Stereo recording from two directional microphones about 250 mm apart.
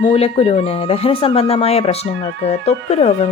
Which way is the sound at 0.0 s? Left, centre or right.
Left.